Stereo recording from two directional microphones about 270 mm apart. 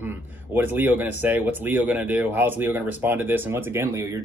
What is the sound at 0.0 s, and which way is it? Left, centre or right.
Speech, centre.